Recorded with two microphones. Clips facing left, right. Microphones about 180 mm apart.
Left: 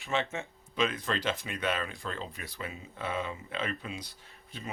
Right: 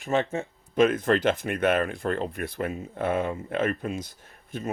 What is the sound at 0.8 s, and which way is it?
Speech, 50° right (ahead or behind).